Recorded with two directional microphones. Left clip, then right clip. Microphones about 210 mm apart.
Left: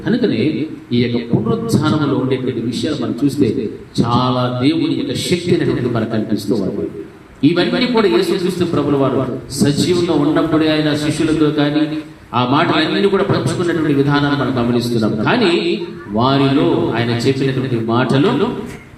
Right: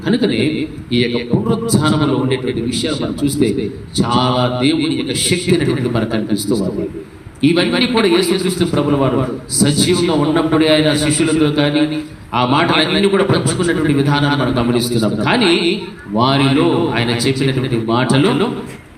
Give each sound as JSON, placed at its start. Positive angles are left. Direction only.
{"t": 0.0, "sound": "a man's voice", "side_deg": -40}